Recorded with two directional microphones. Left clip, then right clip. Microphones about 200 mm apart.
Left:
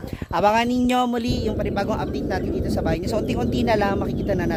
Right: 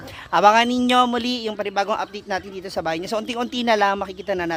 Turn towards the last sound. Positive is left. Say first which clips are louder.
# even
turn(degrees=-10)  # may be behind; listen again after turning